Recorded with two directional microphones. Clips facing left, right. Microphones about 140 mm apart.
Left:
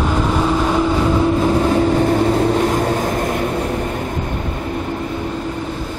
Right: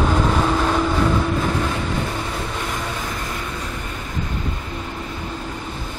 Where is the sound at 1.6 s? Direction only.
40° left (ahead or behind).